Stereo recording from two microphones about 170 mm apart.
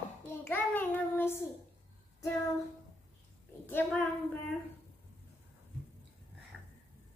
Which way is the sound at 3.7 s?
10° left (ahead or behind).